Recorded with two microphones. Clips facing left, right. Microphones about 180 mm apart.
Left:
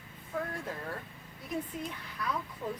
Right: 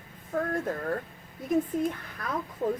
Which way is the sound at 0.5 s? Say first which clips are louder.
Right 9 dB; 45° right (ahead or behind).